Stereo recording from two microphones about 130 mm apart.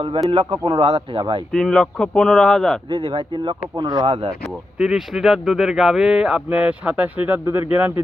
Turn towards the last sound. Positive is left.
turn(degrees=-15)  # may be behind; listen again after turning